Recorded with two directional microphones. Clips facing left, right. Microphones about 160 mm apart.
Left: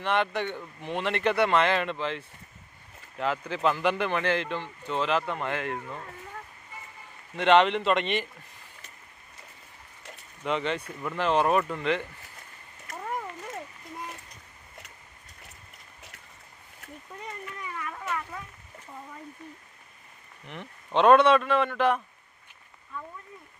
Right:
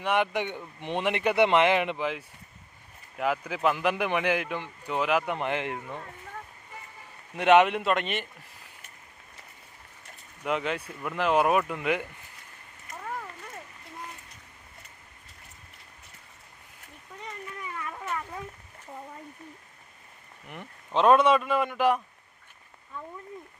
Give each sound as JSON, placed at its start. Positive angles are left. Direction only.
{"t": 0.0, "sound": "speech", "side_deg": -10}
{"t": 7.3, "sound": "speech", "side_deg": -10}
{"t": 10.4, "sound": "speech", "side_deg": -5}
{"t": 20.5, "sound": "speech", "side_deg": -5}